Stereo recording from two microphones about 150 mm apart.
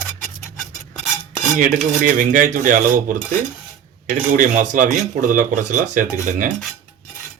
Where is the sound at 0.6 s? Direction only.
Centre (ahead or behind).